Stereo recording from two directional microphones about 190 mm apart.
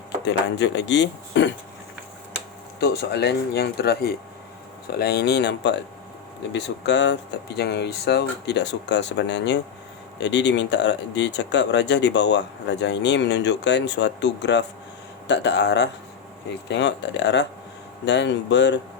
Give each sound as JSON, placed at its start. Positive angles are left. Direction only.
{"t": 0.3, "sound": "speech", "side_deg": 70}
{"t": 2.8, "sound": "speech", "side_deg": 60}